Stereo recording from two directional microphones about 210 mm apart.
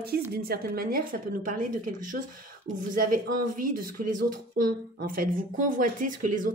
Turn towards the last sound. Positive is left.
turn(degrees=-40)  # may be behind; listen again after turning